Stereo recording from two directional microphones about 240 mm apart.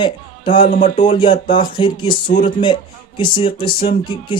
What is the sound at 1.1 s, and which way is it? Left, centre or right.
Speech, left.